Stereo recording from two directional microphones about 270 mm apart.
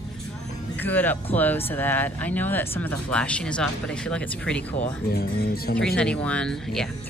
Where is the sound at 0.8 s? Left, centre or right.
Centre.